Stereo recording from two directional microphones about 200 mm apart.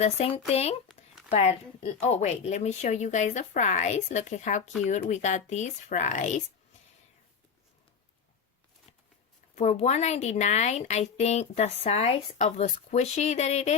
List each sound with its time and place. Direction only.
0.0 s a woman's voice: 30° left (ahead or behind)
9.6 s a woman's voice: 35° left (ahead or behind)